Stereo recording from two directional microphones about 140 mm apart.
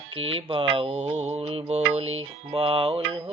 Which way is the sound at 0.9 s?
55° right (ahead or behind).